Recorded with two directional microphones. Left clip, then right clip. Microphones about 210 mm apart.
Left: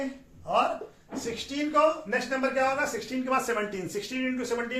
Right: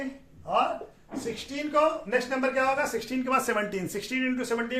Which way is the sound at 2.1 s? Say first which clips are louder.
Right 1 dB; 45° right (ahead or behind).